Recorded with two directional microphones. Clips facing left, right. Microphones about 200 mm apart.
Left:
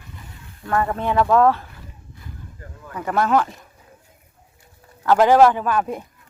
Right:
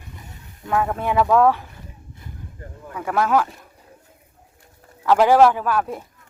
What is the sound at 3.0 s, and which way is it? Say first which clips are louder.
Speech: even; 5° right (ahead or behind).